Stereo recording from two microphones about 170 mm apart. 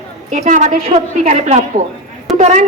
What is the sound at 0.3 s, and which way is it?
A man's voice, 45° right (ahead or behind).